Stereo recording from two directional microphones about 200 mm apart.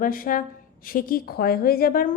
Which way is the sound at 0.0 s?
45° left (ahead or behind).